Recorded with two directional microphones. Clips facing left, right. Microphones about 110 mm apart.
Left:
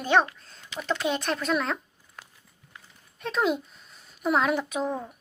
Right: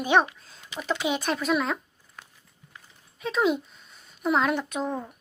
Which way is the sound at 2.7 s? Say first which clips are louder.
Left 1 dB; centre (ahead or behind).